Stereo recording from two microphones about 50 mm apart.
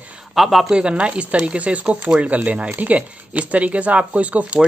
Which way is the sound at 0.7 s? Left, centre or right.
Centre.